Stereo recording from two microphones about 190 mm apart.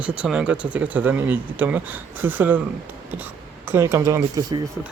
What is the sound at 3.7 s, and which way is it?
Speech, 15° right (ahead or behind).